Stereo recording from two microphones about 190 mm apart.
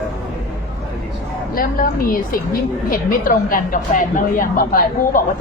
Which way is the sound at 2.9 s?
45° left (ahead or behind).